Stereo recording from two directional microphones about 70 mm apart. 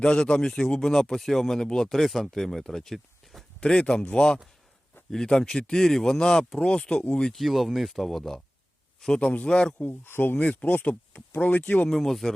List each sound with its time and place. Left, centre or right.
0.0 s speech: centre
7.4 s speech: centre
10.1 s speech: left
10.4 s speech: centre
10.8 s speech: left
11.9 s speech: centre